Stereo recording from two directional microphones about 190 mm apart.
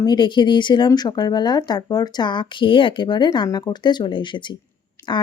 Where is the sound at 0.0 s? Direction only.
25° left (ahead or behind).